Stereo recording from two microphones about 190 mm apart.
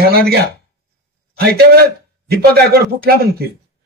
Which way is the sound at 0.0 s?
55° right (ahead or behind).